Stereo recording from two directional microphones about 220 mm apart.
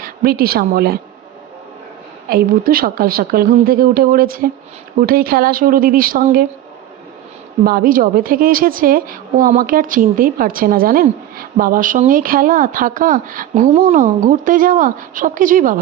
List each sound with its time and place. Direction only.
0.0 s a woman's voice: 45° right (ahead or behind)
2.3 s a woman's voice: 40° right (ahead or behind)
7.6 s a woman's voice: 40° right (ahead or behind)